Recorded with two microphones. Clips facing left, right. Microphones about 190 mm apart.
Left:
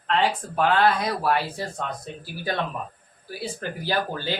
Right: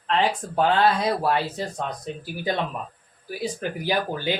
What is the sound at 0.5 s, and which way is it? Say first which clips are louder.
Speech: right 1 dB; 25° right (ahead or behind).